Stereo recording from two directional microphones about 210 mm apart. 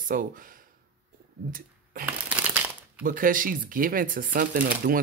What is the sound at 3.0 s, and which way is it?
Speech, 40° right (ahead or behind).